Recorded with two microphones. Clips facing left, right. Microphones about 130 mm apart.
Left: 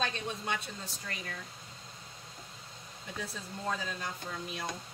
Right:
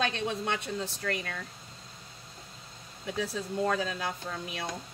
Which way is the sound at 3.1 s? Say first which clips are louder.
Right 10 dB; 75° right (ahead or behind).